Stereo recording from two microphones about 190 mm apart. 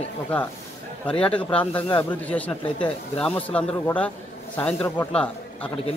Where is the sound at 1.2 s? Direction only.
5° left (ahead or behind).